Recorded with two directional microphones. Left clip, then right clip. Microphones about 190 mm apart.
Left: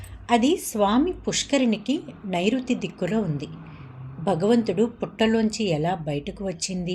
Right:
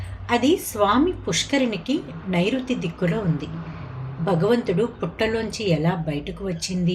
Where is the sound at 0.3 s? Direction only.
40° left (ahead or behind).